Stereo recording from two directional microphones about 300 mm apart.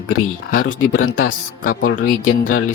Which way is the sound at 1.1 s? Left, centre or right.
Left.